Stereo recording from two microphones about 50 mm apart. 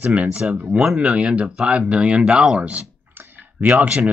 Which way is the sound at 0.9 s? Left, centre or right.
Right.